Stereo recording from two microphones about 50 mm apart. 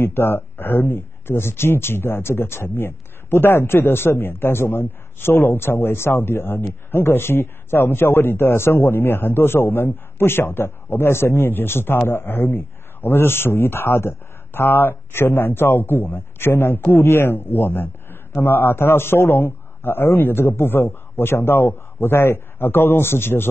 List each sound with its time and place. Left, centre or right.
0.0 s a man's voice: left